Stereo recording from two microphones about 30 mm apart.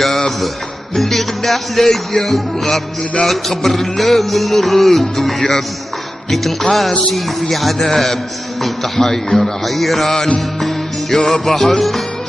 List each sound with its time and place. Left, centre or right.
0.0 s mantra: centre
0.9 s a man's voice: centre
6.3 s a man's voice: centre
11.1 s a man's voice: centre